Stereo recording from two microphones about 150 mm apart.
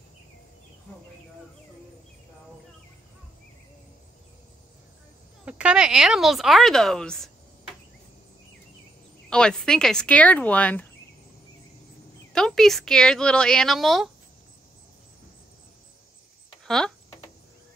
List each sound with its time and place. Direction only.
5.4 s speech: 5° right (ahead or behind)
9.3 s speech: 5° left (ahead or behind)
12.3 s speech: 5° left (ahead or behind)
16.6 s speech: 5° left (ahead or behind)